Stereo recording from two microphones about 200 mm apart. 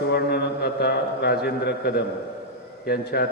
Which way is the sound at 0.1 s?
55° left (ahead or behind).